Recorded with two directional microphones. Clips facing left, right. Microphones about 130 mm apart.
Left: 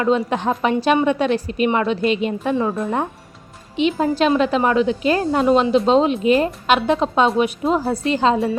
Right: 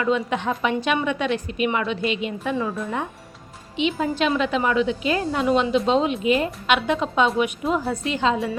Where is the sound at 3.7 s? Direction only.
40° left (ahead or behind).